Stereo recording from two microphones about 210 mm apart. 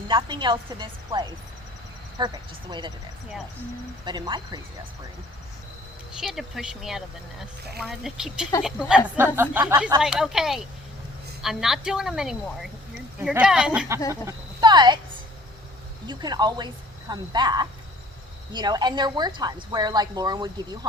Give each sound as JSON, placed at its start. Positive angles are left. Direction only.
{"t": 0.1, "sound": "a woman's voice", "side_deg": -20}
{"t": 4.0, "sound": "a woman's voice", "side_deg": -20}
{"t": 6.1, "sound": "speech", "side_deg": 0}
{"t": 10.0, "sound": "speech", "side_deg": 0}
{"t": 16.0, "sound": "a woman's voice", "side_deg": -20}